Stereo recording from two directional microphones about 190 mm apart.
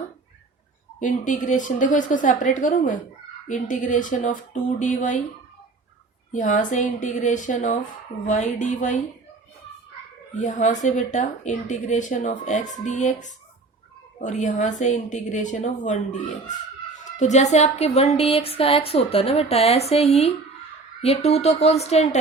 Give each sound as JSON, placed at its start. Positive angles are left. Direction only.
{"t": 0.9, "sound": "speech", "side_deg": 40}
{"t": 6.3, "sound": "speech", "side_deg": 40}
{"t": 10.4, "sound": "speech", "side_deg": 40}